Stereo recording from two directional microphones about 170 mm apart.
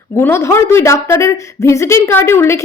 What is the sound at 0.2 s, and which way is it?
Speech, 15° left (ahead or behind).